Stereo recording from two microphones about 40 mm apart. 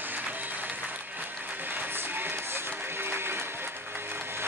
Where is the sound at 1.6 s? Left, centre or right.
Right.